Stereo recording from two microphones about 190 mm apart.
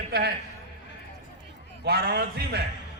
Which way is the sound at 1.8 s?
55° right (ahead or behind).